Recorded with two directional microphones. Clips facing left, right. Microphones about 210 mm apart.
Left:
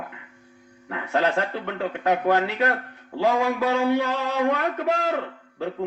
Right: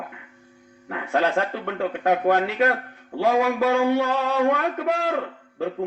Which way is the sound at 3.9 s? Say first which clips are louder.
Right 2 dB; 50° right (ahead or behind).